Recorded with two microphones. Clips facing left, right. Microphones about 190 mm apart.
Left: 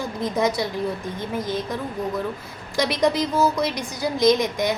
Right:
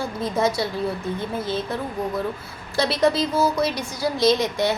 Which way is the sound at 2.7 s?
15° left (ahead or behind).